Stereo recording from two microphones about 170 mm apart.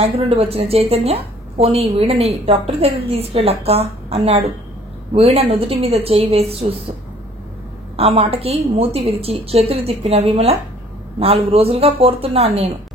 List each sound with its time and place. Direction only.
0.0 s a woman's voice: 35° right (ahead or behind)
7.9 s a woman's voice: 35° right (ahead or behind)
11.5 s a woman's voice: 35° right (ahead or behind)